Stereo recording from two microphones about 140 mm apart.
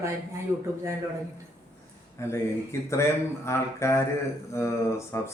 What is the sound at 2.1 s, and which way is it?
A man's voice, 20° left (ahead or behind).